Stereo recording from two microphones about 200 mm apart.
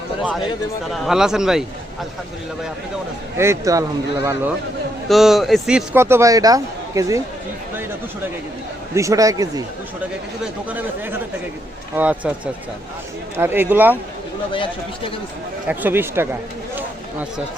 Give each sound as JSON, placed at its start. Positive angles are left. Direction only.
{"t": 1.0, "sound": "speech", "side_deg": 0}
{"t": 3.3, "sound": "a man's voice", "side_deg": -15}
{"t": 5.0, "sound": "a man's voice", "side_deg": 0}
{"t": 9.0, "sound": "a man's voice", "side_deg": -15}
{"t": 13.3, "sound": "a man's voice", "side_deg": -10}
{"t": 14.5, "sound": "speech", "side_deg": 25}
{"t": 15.6, "sound": "speech", "side_deg": -10}